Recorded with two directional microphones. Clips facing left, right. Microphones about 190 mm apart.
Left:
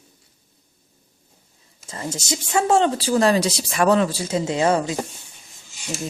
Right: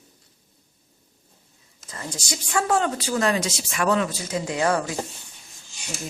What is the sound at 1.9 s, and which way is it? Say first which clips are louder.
Speech: left 5 dB; 25° left (ahead or behind).